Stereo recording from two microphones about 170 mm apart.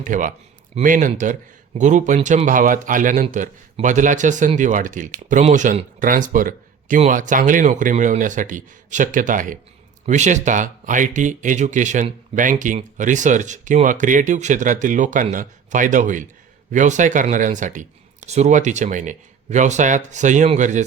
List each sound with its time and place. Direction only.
0.0 s a man's voice: 50° right (ahead or behind)